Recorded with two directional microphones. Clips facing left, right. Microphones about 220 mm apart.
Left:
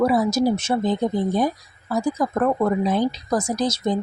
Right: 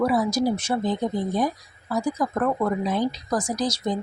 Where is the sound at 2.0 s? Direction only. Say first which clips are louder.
Left 3 dB; 25° left (ahead or behind).